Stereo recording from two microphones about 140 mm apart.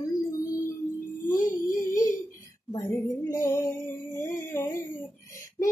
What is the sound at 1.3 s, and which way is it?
Child singing, 20° left (ahead or behind).